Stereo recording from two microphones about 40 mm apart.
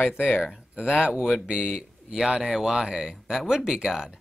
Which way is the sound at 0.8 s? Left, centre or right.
Right.